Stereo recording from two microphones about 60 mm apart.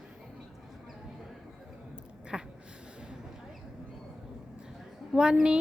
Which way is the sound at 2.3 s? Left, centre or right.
Centre.